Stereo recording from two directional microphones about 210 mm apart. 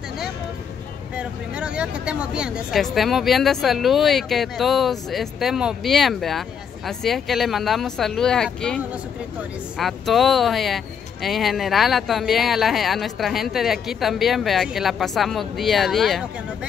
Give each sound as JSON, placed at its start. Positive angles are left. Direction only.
{"t": 1.1, "sound": "speech", "side_deg": -5}